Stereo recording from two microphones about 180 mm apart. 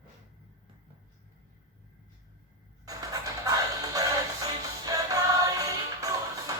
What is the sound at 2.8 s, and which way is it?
Music, 20° right (ahead or behind).